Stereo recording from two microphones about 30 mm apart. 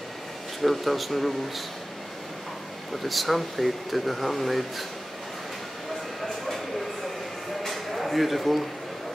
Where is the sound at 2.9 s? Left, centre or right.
Centre.